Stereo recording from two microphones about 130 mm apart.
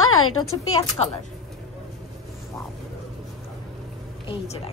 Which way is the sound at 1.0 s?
40° left (ahead or behind).